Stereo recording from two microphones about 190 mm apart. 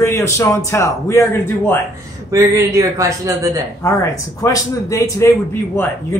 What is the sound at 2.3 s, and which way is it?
Speech, 15° right (ahead or behind).